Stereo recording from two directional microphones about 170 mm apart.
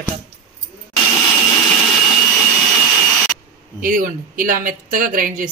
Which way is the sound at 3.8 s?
55° right (ahead or behind).